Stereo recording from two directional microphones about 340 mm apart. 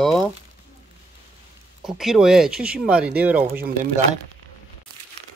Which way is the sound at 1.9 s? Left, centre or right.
Centre.